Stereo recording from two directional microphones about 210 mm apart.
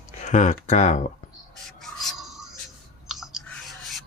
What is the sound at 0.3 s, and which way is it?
Speech, 35° left (ahead or behind).